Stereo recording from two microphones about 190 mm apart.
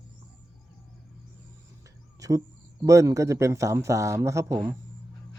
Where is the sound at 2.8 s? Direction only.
15° right (ahead or behind).